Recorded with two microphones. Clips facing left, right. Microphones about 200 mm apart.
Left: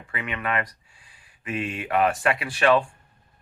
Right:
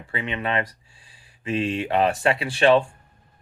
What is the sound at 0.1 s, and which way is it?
Speech, 25° right (ahead or behind).